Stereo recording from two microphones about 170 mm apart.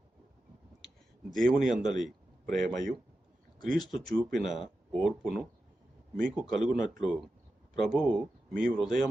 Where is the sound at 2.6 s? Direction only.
50° right (ahead or behind).